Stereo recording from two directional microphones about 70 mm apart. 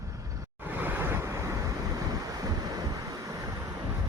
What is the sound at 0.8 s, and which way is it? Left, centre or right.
Waves, right.